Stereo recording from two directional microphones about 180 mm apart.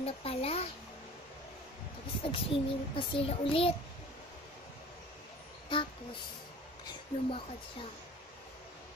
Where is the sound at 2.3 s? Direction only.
30° left (ahead or behind).